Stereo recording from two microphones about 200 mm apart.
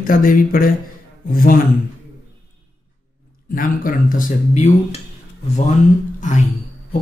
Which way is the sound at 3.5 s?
45° left (ahead or behind).